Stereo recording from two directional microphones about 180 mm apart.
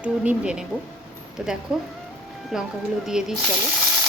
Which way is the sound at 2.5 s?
Centre (ahead or behind).